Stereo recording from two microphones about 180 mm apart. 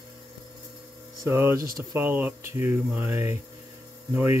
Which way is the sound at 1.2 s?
15° right (ahead or behind).